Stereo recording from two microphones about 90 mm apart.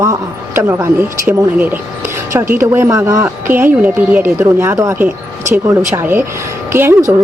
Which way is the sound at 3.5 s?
20° right (ahead or behind).